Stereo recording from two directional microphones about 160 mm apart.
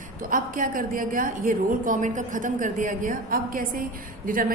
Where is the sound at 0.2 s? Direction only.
60° right (ahead or behind).